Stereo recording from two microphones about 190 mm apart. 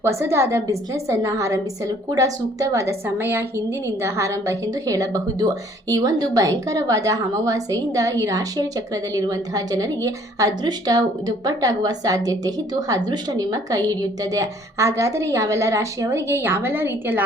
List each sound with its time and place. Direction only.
0.0 s a woman's voice: 15° right (ahead or behind)